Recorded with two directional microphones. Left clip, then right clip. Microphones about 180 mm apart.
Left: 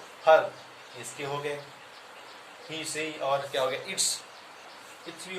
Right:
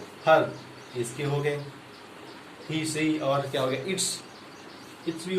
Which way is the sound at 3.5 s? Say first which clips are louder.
Right 1 dB; 15° left (ahead or behind).